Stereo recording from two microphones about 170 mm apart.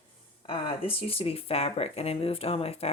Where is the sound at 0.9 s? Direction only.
35° left (ahead or behind).